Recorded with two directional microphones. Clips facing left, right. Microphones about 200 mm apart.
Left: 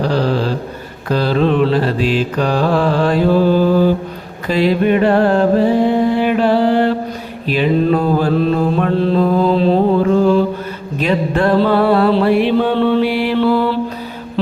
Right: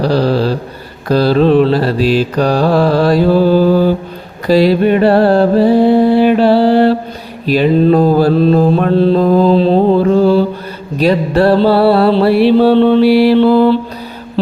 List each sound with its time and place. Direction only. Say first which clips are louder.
0.0 s music: right 4 dB; 35° right (ahead or behind)
4.4 s mantra: right 5 dB; 35° right (ahead or behind)
11.0 s music: right 5 dB; 35° right (ahead or behind)